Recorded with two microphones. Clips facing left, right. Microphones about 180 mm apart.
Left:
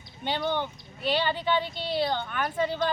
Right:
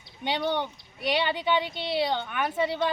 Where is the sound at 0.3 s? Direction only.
15° right (ahead or behind).